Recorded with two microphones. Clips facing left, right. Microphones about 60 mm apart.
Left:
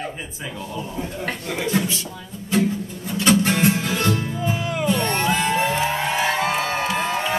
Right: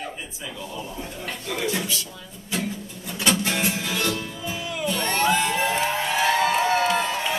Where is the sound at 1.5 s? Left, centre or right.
Left.